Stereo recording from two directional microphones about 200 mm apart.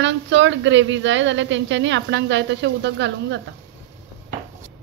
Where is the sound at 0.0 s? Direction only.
65° right (ahead or behind).